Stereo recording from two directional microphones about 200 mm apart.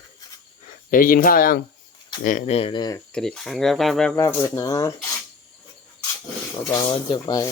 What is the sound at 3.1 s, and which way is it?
Speech, centre (ahead or behind).